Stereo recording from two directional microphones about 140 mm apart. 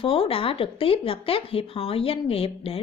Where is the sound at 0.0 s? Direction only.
40° left (ahead or behind).